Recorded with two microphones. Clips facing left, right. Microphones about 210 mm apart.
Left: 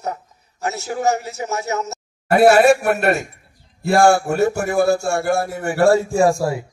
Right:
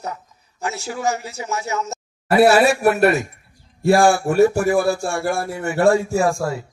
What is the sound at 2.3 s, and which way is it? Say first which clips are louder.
Speech: left 2 dB; 55° left (ahead or behind).